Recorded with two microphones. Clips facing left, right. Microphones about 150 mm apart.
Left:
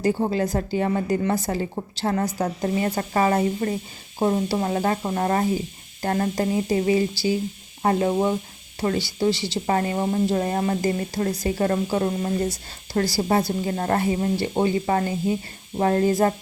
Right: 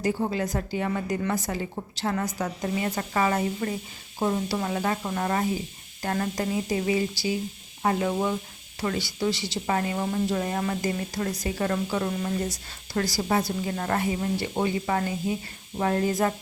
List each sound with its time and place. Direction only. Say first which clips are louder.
0.0 s speech: left 4 dB; 30° left (ahead or behind)